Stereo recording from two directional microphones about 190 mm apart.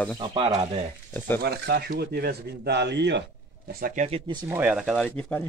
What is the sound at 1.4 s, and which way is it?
Speech, 60° right (ahead or behind).